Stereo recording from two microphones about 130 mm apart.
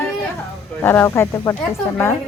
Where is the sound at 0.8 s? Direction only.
20° left (ahead or behind).